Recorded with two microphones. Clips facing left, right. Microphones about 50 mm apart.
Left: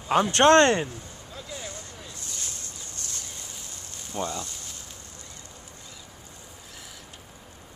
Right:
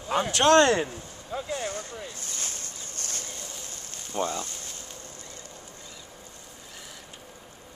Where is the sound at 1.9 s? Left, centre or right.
Right.